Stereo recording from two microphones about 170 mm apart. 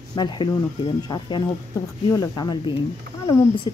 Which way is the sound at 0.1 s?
25° left (ahead or behind).